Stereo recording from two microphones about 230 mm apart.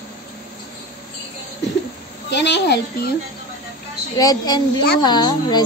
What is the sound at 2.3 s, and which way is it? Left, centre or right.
Speech, left.